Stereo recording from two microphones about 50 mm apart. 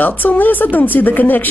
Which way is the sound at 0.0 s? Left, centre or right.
Left.